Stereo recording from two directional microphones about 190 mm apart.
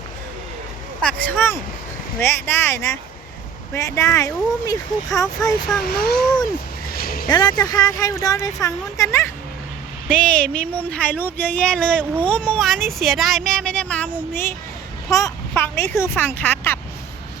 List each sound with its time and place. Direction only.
1.0 s speech: 10° left (ahead or behind)
5.8 s speech: 55° left (ahead or behind)
6.9 s a sound: 50° left (ahead or behind)
7.3 s speech: 20° left (ahead or behind)